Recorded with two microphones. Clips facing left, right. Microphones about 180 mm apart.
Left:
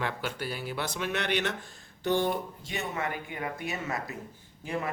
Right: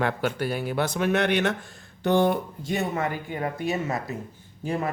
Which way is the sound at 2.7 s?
35° right (ahead or behind).